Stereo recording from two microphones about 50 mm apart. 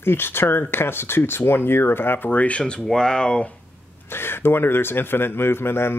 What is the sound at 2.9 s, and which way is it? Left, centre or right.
Speech, centre.